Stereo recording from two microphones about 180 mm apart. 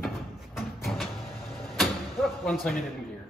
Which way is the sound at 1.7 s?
Centre (ahead or behind).